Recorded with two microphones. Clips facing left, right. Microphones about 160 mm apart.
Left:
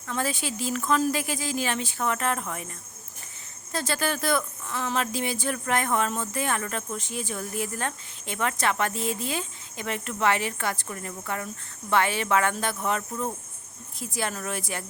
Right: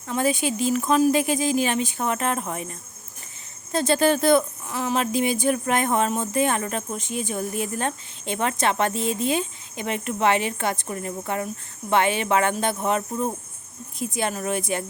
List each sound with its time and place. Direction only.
0.1 s speech: 15° right (ahead or behind)